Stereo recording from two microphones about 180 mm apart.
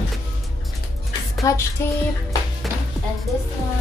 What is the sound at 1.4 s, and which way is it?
Music, 15° left (ahead or behind).